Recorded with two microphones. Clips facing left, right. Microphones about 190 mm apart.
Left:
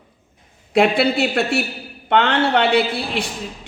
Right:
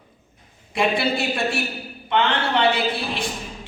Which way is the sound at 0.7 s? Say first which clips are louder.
Left 6 dB; 65° left (ahead or behind).